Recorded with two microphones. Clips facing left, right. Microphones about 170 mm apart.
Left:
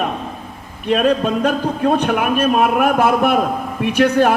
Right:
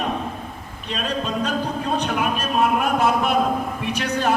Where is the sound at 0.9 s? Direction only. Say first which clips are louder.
Left 10 dB; 55° left (ahead or behind).